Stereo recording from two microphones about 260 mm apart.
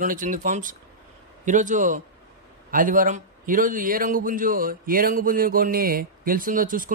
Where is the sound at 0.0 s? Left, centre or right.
Right.